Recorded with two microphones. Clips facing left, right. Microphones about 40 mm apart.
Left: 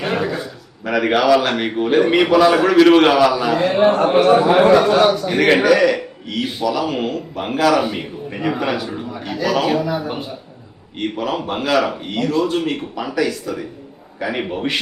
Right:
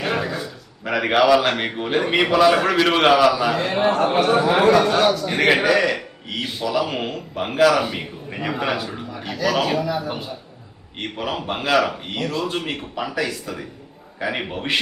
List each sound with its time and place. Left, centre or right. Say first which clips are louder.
0.0 s a sound: left 3 dB; centre
0.9 s a man's voice: left 2 dB; centre
9.8 s a man's voice: left 2 dB; centre
11.2 s a man's voice: left 2 dB; centre
12.5 s a man's voice: left 6 dB; centre